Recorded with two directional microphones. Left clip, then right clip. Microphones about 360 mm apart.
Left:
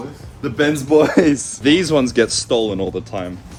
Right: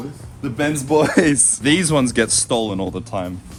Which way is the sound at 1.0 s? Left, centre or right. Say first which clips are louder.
Left 2 dB; right.